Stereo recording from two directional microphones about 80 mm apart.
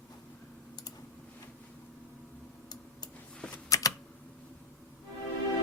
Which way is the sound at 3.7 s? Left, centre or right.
Left.